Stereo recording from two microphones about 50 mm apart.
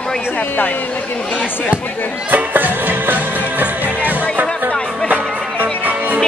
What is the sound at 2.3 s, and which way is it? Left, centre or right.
Music, right.